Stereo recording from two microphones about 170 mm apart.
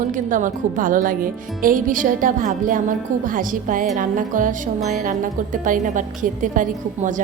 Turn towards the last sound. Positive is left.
turn(degrees=-50)  # may be behind; listen again after turning